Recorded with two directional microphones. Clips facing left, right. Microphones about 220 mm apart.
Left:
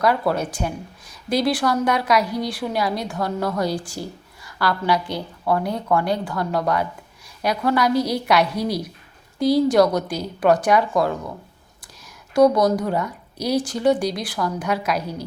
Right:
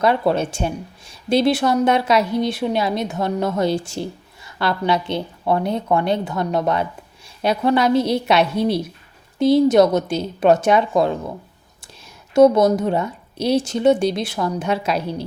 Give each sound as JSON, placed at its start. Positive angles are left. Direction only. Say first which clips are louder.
{"t": 0.0, "sound": "speech", "louder": "right 3 dB", "side_deg": -25}
{"t": 12.3, "sound": "speech", "louder": "right 3 dB", "side_deg": -25}